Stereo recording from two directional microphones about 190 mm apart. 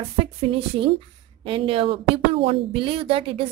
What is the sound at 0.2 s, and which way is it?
A woman's voice, 30° right (ahead or behind).